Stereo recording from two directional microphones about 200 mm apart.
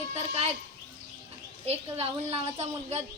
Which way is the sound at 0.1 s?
30° right (ahead or behind).